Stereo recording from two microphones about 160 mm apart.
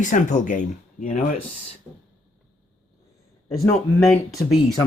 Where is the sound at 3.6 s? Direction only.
15° left (ahead or behind).